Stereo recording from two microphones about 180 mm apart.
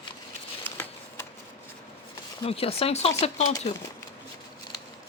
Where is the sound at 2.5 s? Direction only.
30° left (ahead or behind).